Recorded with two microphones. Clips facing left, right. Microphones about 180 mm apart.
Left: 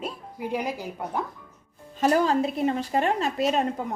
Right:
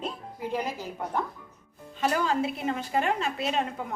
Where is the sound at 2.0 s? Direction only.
40° left (ahead or behind).